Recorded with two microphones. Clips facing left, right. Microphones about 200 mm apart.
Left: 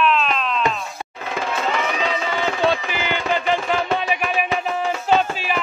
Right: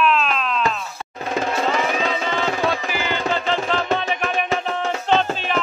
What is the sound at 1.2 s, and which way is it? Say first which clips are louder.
Music: right 3 dB; 40° right (ahead or behind).